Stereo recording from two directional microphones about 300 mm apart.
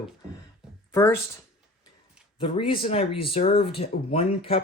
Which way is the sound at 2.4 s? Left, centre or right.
Centre.